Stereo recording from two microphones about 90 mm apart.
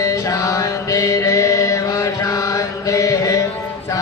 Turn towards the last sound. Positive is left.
turn(degrees=40)  # may be behind; listen again after turning